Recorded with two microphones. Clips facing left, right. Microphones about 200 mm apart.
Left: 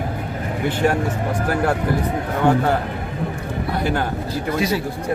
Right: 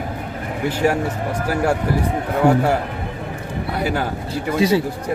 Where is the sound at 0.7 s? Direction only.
5° right (ahead or behind).